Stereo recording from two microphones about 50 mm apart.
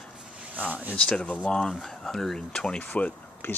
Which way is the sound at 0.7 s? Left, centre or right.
Right.